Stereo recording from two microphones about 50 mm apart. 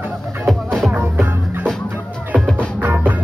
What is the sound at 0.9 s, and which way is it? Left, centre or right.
Music, right.